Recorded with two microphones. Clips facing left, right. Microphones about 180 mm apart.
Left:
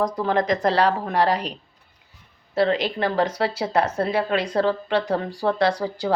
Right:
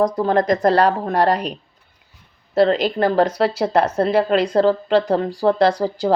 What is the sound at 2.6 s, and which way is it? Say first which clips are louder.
A woman's voice: right 5 dB; 45° right (ahead or behind).